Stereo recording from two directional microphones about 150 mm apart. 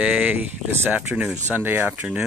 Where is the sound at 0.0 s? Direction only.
10° right (ahead or behind).